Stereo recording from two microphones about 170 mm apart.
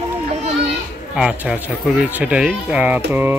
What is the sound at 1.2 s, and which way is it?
Speech, 5° right (ahead or behind).